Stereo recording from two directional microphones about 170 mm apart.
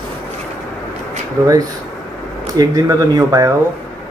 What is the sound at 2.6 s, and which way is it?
Speech, 20° right (ahead or behind).